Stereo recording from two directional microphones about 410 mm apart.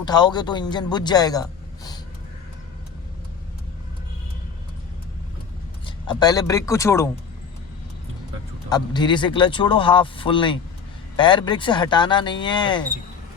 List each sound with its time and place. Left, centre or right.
0.0 s a man's voice: centre
5.8 s speech: centre
8.7 s speech: centre